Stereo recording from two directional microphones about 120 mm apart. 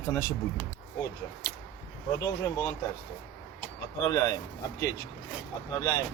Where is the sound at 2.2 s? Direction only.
25° left (ahead or behind).